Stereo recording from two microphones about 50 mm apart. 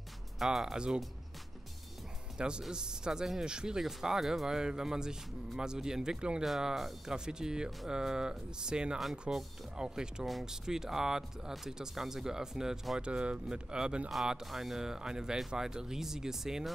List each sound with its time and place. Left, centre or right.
0.4 s speech: centre
0.7 s speech: centre
2.3 s speech: centre
6.4 s speech: centre
13.0 s speech: right